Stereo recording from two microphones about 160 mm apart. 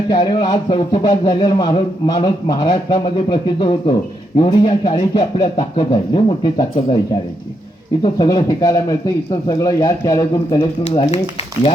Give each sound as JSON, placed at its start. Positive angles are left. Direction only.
{"t": 0.1, "sound": "speech", "side_deg": 30}
{"t": 10.8, "sound": "speech", "side_deg": 40}